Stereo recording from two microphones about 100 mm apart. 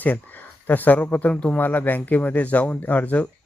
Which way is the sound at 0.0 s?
15° left (ahead or behind).